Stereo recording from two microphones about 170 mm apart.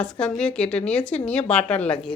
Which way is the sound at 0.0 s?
5° left (ahead or behind).